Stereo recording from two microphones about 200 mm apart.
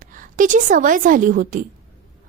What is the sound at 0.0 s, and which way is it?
A woman's voice, 40° right (ahead or behind).